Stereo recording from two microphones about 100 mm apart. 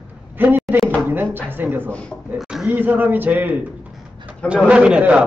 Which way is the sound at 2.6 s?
20° right (ahead or behind).